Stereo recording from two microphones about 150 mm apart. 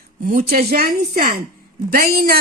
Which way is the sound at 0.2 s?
65° right (ahead or behind).